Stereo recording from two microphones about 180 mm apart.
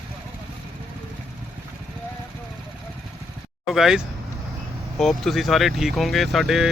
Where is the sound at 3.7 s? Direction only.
Centre (ahead or behind).